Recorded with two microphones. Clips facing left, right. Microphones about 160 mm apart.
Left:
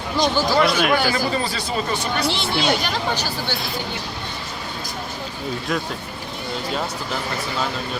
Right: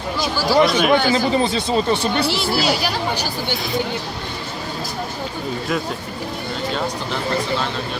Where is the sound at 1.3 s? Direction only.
25° right (ahead or behind).